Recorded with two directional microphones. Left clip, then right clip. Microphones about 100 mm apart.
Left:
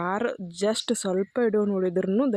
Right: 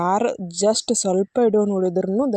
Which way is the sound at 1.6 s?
25° right (ahead or behind).